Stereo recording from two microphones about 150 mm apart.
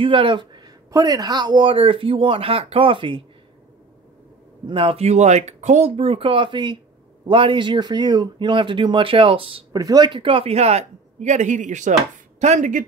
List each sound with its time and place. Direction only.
0.0 s speech: 35° right (ahead or behind)
4.6 s speech: 40° right (ahead or behind)
9.7 s speech: 25° right (ahead or behind); by 12.8 s 55° right (ahead or behind)